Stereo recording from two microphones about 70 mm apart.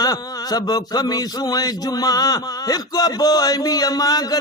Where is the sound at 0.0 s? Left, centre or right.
Left.